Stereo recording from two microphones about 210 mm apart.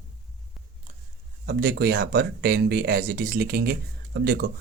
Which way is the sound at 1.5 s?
45° right (ahead or behind).